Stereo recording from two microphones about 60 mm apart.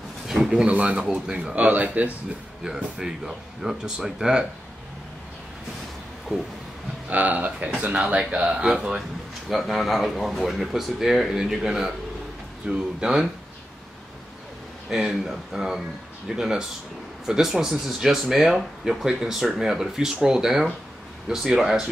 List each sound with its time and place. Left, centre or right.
0.3 s a sound: centre
0.7 s speech: centre
2.6 s speech: centre
6.3 s speech: centre
7.1 s speech: right; by 9.0 s centre
9.5 s speech: centre
12.6 s speech: right
13.0 s speech: centre
14.9 s speech: centre